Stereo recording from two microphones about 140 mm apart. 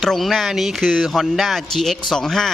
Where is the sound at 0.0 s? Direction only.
Centre (ahead or behind).